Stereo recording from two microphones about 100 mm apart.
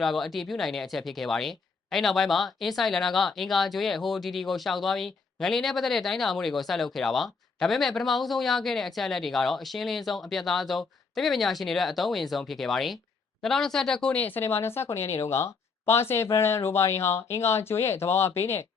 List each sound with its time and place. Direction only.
0.0 s speech: centre (ahead or behind); by 18.6 s 25° left (ahead or behind)